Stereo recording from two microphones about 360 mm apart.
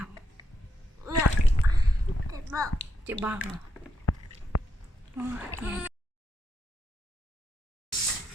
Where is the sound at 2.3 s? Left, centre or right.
Centre.